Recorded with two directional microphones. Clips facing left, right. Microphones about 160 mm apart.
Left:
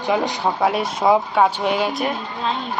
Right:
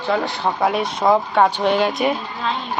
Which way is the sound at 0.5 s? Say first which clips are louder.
Right 2 dB; centre (ahead or behind).